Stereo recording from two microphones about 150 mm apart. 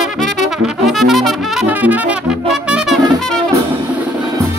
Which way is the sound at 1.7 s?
10° right (ahead or behind).